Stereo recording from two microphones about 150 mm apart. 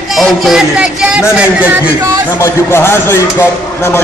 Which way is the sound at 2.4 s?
15° left (ahead or behind).